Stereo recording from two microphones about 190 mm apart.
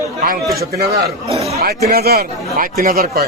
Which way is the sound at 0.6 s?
55° right (ahead or behind).